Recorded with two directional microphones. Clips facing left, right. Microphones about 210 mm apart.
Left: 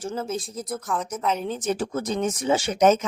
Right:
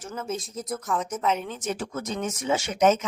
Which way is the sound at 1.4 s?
35° left (ahead or behind).